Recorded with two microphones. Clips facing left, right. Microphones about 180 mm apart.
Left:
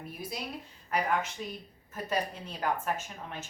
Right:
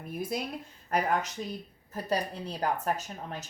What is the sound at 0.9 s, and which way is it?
A woman's voice, 40° right (ahead or behind).